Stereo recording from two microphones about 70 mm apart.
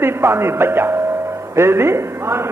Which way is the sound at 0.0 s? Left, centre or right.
Right.